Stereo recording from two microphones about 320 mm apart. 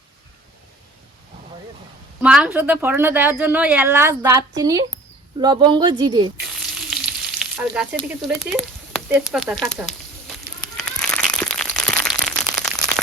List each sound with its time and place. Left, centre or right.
2.2 s speech: centre
6.4 s frying: centre
10.8 s a sound: centre